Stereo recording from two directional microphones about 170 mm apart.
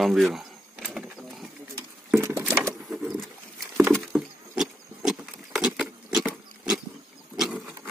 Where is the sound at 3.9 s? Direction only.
5° right (ahead or behind).